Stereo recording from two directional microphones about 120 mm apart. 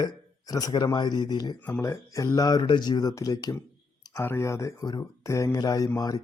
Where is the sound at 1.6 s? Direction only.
20° left (ahead or behind).